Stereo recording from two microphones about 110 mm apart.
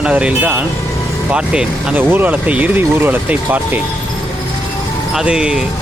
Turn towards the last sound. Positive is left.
turn(degrees=-5)  # may be behind; listen again after turning